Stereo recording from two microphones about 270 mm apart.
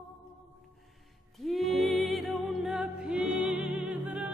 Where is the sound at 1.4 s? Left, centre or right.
Centre.